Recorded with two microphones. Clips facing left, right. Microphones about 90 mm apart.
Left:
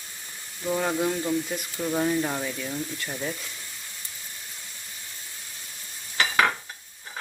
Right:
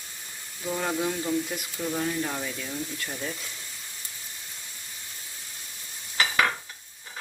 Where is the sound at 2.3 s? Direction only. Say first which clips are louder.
Left 3 dB; 5° left (ahead or behind).